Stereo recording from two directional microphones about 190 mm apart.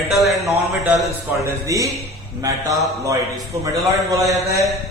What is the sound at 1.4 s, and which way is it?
Speech, 15° right (ahead or behind).